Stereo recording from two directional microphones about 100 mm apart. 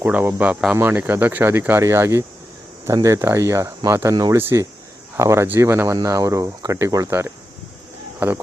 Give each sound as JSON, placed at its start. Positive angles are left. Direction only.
{"t": 0.0, "sound": "speech", "side_deg": -20}
{"t": 4.1, "sound": "speech", "side_deg": -40}
{"t": 4.4, "sound": "speech", "side_deg": -20}
{"t": 7.1, "sound": "speech", "side_deg": -20}